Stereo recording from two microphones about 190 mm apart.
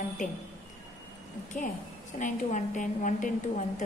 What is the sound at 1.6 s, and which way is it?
A woman's voice, 45° left (ahead or behind).